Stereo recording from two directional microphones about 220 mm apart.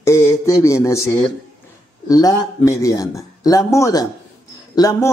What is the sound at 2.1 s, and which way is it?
Speech, 15° left (ahead or behind).